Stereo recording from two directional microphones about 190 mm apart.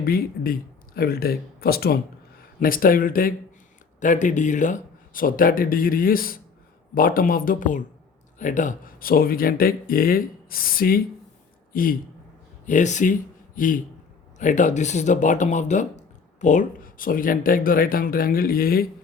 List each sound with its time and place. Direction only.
0.0 s speech: 50° left (ahead or behind)